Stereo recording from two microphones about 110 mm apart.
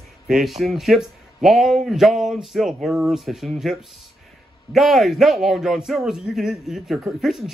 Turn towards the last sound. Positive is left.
turn(degrees=0)  # may be behind; listen again after turning